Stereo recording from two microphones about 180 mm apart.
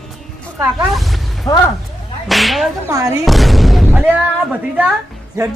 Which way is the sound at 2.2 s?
Centre (ahead or behind).